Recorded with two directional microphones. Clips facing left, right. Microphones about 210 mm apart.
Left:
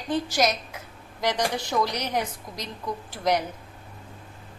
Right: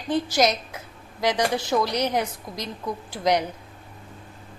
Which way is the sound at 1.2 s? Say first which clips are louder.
Right 3 dB; 10° right (ahead or behind).